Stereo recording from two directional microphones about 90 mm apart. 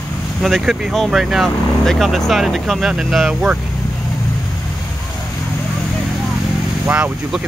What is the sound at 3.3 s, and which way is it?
Speech, 15° right (ahead or behind).